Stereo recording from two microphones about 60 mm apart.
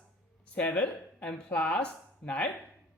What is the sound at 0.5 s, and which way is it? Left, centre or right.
A woman's voice, left.